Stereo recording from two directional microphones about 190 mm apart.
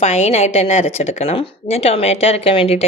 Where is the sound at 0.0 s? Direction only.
35° left (ahead or behind).